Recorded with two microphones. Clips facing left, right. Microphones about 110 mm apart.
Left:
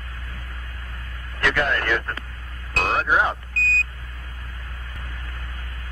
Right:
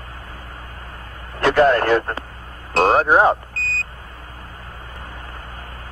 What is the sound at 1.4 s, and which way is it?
Speech, 35° right (ahead or behind).